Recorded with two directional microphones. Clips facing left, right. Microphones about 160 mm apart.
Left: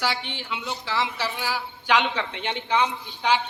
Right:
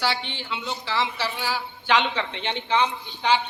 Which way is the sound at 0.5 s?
5° left (ahead or behind).